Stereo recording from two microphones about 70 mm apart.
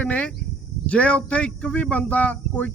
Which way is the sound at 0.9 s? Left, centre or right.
Centre.